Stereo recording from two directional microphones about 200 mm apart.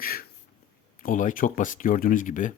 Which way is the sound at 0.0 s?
45° left (ahead or behind).